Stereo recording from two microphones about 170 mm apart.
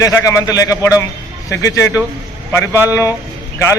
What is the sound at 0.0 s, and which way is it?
A man's voice, 20° left (ahead or behind).